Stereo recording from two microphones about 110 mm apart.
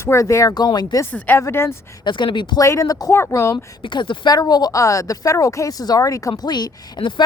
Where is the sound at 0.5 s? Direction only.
40° left (ahead or behind).